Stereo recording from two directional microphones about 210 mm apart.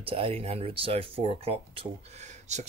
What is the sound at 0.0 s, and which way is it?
Speech, 25° right (ahead or behind).